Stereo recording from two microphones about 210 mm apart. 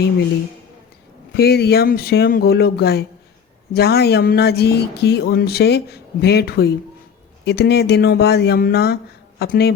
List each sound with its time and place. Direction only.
1.4 s speech: 50° left (ahead or behind)